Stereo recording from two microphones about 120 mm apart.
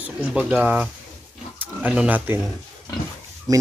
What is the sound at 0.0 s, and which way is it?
Speech, 10° right (ahead or behind).